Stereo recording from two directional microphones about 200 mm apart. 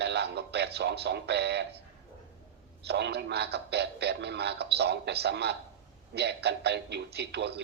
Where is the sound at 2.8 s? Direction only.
55° right (ahead or behind).